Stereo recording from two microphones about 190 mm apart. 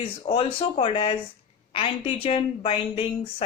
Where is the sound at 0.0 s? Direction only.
30° left (ahead or behind).